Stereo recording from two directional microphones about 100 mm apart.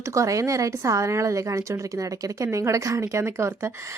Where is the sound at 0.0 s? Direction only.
30° right (ahead or behind).